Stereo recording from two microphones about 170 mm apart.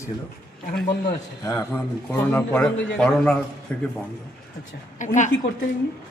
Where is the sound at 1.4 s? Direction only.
15° left (ahead or behind).